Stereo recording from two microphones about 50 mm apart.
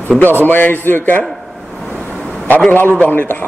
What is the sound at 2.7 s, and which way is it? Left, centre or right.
Speech, left.